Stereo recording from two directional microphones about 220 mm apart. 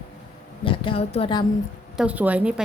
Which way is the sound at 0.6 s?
25° left (ahead or behind).